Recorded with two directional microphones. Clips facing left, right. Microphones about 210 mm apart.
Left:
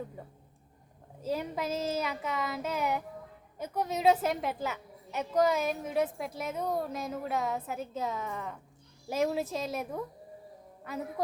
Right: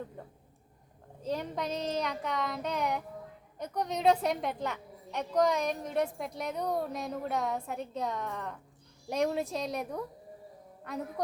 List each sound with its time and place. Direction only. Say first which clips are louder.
0.2 s a woman's voice: even; 10° left (ahead or behind)